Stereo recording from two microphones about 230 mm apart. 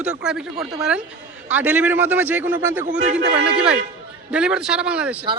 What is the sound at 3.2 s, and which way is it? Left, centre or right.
Speech, right.